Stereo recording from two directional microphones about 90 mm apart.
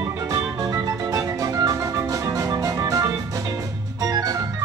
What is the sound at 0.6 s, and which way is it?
Organ, 40° right (ahead or behind).